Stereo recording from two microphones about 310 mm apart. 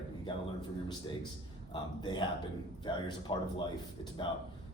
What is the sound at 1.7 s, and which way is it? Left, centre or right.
Speech, centre.